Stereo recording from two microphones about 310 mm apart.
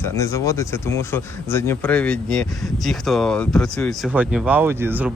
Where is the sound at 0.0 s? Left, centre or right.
Centre.